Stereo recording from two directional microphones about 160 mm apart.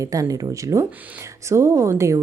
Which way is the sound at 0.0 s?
20° right (ahead or behind).